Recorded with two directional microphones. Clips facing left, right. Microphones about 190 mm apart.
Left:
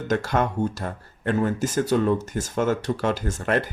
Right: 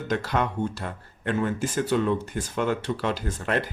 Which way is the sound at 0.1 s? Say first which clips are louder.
Left 3 dB; 45° left (ahead or behind).